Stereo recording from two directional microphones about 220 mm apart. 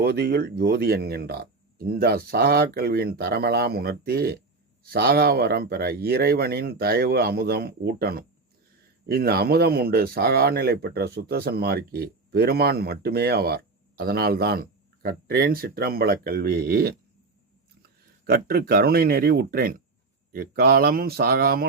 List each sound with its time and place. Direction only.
0.0 s speech: 45° right (ahead or behind)
18.3 s speech: 45° right (ahead or behind)